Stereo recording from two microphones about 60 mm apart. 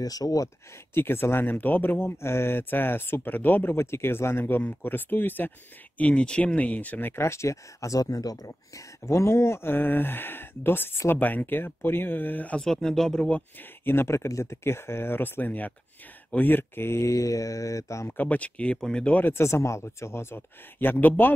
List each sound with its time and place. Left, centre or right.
0.0 s speech: left
0.9 s speech: left
3.8 s speech: left
7.2 s speech: left
12.5 s speech: centre
13.6 s speech: left
18.1 s speech: left
19.3 s speech: left